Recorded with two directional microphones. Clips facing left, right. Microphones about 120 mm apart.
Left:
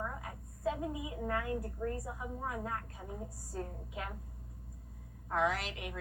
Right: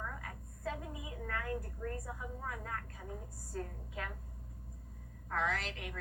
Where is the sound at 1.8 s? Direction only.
25° left (ahead or behind).